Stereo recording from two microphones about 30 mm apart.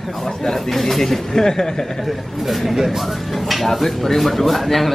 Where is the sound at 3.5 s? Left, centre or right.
Centre.